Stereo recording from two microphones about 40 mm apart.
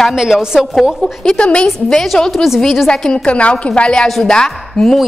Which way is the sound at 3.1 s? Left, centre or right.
Left.